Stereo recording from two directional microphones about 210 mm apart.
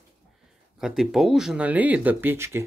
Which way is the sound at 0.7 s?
Centre (ahead or behind).